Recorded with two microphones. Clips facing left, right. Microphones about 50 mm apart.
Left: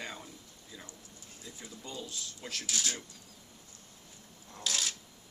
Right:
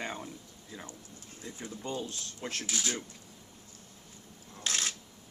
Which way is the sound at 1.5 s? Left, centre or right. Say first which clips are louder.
Right 7 dB; right.